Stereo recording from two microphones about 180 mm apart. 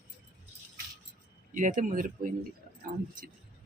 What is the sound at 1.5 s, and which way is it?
Speech, 45° right (ahead or behind).